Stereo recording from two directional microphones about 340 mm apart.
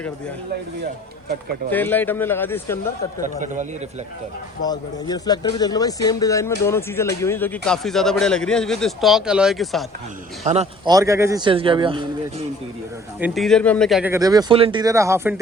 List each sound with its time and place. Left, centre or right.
1.7 s speech: centre
3.4 s a man's voice: right
4.6 s speech: centre
10.4 s speech: centre
13.1 s speech: centre